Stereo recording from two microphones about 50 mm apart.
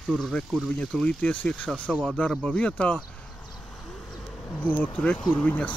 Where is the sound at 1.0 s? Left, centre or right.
Left.